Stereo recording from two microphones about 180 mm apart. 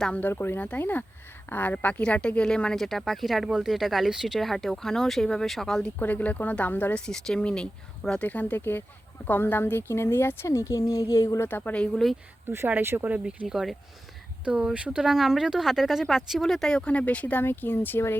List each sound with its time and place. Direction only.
0.0 s a woman's voice: 10° left (ahead or behind)
12.5 s a woman's voice: 10° right (ahead or behind); by 18.2 s 10° left (ahead or behind)